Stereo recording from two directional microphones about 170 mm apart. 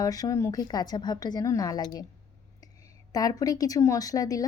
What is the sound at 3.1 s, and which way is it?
A woman's voice, 20° left (ahead or behind).